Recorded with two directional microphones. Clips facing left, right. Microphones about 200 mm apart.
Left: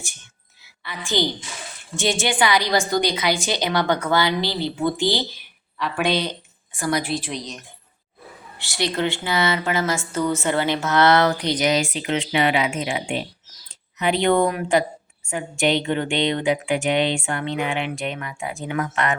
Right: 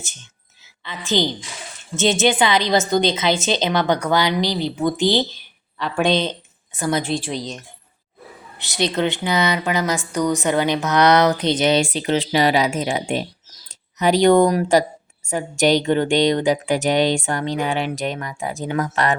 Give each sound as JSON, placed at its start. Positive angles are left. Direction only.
{"t": 0.9, "sound": "a woman's voice", "side_deg": -20}
{"t": 5.8, "sound": "speech", "side_deg": 5}
{"t": 6.7, "sound": "a woman's voice", "side_deg": -20}
{"t": 8.5, "sound": "a woman's voice", "side_deg": -20}